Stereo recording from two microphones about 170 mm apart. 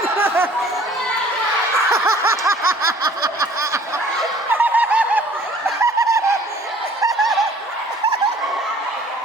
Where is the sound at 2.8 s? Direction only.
20° right (ahead or behind).